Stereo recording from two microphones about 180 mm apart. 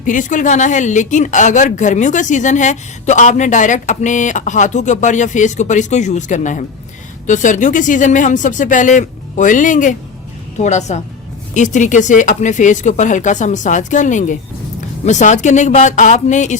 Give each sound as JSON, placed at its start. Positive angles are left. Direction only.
{"t": 0.0, "sound": "a woman's voice", "side_deg": 45}